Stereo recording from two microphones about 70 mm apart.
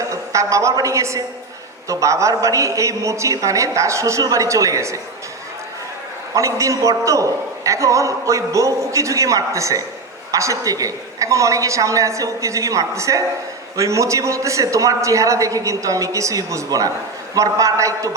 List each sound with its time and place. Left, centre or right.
0.1 s a woman's voice: right
6.3 s a man's voice: right